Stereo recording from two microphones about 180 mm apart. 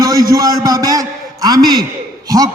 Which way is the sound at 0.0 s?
20° right (ahead or behind).